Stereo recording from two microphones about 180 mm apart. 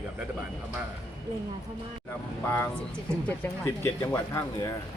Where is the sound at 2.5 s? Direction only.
10° left (ahead or behind).